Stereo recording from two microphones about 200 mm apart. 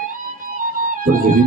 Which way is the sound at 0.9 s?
40° right (ahead or behind).